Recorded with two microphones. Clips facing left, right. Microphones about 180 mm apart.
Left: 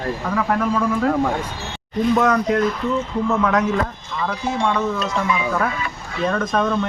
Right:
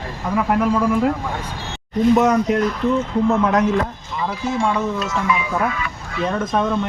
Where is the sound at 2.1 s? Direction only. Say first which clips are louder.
Right 2 dB; 15° right (ahead or behind).